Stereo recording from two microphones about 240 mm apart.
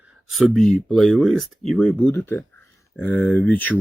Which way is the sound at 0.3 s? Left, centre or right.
Centre.